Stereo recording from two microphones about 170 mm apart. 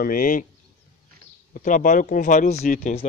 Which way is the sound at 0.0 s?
55° left (ahead or behind).